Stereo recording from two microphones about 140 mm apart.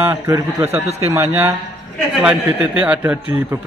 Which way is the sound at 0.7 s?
45° right (ahead or behind).